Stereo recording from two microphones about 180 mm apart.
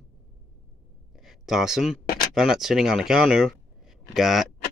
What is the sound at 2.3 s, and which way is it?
Speech, centre (ahead or behind).